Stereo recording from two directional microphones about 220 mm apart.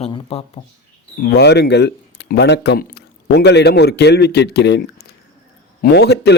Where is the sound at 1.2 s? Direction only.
50° left (ahead or behind).